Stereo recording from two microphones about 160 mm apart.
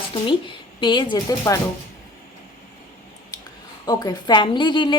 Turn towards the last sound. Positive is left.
turn(degrees=30)  # may be behind; listen again after turning